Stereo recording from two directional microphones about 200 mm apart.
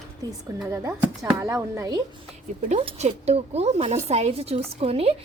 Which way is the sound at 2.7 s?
35° right (ahead or behind).